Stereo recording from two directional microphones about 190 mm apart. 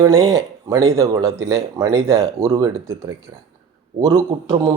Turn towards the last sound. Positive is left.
turn(degrees=-20)  # may be behind; listen again after turning